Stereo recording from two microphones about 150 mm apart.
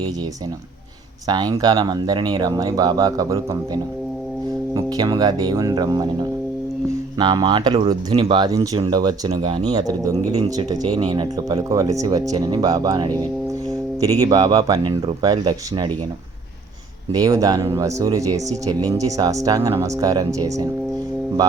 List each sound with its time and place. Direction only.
1.3 s speech: 25° right (ahead or behind)
7.2 s speech: 30° right (ahead or behind)
17.1 s speech: 20° right (ahead or behind)